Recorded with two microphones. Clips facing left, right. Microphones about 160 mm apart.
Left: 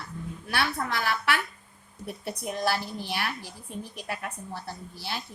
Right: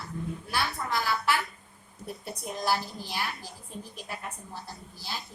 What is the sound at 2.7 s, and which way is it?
Speech, 65° left (ahead or behind).